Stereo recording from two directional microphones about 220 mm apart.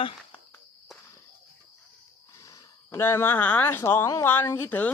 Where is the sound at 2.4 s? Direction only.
15° left (ahead or behind).